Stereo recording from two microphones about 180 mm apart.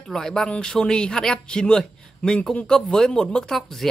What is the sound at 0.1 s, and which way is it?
Speech, 5° left (ahead or behind).